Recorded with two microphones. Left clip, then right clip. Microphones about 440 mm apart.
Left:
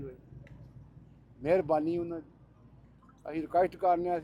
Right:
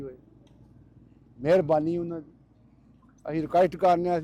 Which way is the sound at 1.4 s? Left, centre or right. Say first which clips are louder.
Right 5 dB; right.